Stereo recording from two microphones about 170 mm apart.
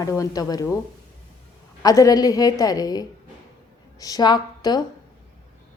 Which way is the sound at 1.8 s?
20° left (ahead or behind).